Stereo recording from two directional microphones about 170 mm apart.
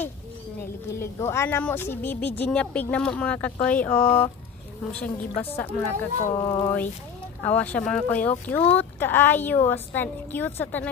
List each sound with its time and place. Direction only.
0.8 s a woman's voice: 15° left (ahead or behind)
6.3 s a sound: 20° left (ahead or behind)
7.4 s a woman's voice: 10° left (ahead or behind)